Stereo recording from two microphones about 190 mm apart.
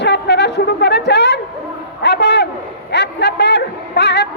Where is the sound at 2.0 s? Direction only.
60° left (ahead or behind).